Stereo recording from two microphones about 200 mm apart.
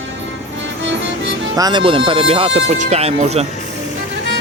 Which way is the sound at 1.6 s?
20° right (ahead or behind).